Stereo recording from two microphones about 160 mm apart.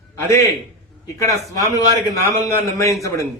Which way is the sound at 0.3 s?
20° left (ahead or behind).